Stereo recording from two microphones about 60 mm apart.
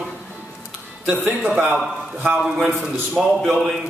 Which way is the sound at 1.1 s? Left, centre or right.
Centre.